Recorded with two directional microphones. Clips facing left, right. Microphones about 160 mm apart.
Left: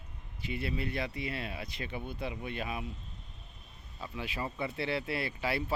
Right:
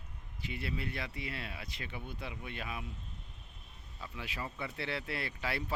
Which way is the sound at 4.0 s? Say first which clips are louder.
Left 5 dB; 25° left (ahead or behind).